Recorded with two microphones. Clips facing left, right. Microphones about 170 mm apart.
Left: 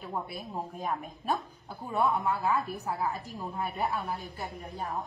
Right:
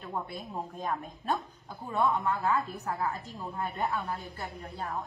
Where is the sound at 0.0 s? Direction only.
5° left (ahead or behind).